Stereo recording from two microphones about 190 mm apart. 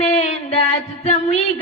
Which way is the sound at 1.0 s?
35° left (ahead or behind).